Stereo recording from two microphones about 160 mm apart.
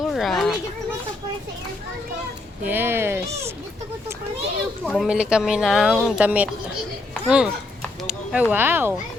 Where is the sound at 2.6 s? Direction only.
10° right (ahead or behind).